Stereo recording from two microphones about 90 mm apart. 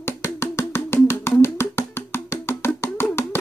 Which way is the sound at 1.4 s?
30° left (ahead or behind).